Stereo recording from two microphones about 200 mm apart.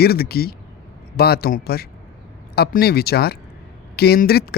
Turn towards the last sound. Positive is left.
turn(degrees=50)  # may be behind; listen again after turning